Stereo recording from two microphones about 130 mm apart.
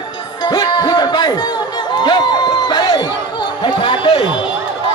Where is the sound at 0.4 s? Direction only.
30° left (ahead or behind).